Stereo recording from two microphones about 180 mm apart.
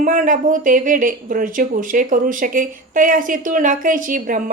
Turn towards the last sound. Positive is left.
turn(degrees=-50)  # may be behind; listen again after turning